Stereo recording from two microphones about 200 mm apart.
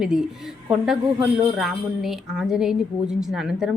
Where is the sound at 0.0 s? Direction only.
5° right (ahead or behind).